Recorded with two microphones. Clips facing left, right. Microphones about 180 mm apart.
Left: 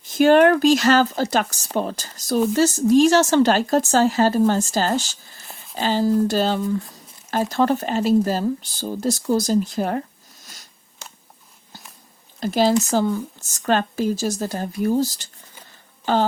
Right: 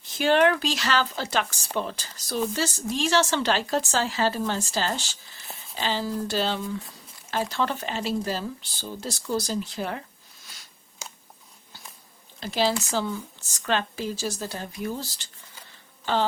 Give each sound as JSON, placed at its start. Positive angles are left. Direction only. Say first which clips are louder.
{"t": 0.1, "sound": "speech", "louder": "left 7 dB", "side_deg": 45}
{"t": 12.4, "sound": "speech", "louder": "left 7 dB", "side_deg": 45}